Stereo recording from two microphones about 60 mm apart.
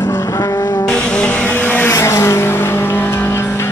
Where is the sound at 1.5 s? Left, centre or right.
Left.